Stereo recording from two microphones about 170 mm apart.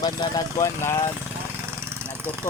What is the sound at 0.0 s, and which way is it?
Speech, 20° left (ahead or behind).